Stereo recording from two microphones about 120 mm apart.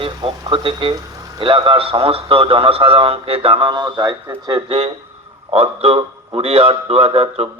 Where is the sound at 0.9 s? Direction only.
30° right (ahead or behind).